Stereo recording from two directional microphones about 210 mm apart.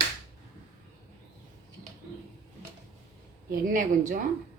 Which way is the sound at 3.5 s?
40° right (ahead or behind).